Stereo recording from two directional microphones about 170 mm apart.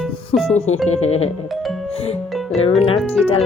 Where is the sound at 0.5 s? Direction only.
40° left (ahead or behind).